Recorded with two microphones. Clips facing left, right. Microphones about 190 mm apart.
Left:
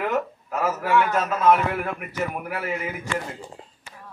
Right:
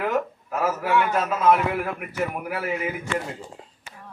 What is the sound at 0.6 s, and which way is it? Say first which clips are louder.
A man's voice: left 1 dB; 10° right (ahead or behind).